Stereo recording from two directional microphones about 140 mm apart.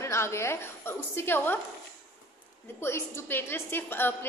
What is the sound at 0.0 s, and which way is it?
A woman's voice, 20° left (ahead or behind).